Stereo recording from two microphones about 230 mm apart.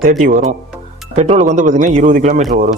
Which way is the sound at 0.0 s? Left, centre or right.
Right.